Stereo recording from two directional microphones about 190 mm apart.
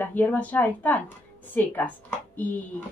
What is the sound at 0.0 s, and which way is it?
A woman's voice, 10° left (ahead or behind).